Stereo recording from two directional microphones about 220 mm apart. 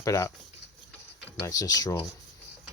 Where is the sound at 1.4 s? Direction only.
15° left (ahead or behind).